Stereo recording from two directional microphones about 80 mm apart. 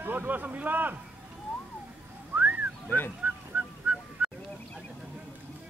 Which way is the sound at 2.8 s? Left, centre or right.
Left.